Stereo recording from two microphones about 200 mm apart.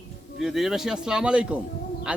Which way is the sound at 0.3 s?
Centre (ahead or behind).